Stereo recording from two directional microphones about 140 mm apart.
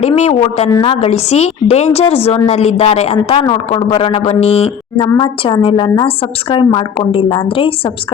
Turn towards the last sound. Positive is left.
turn(degrees=40)  # may be behind; listen again after turning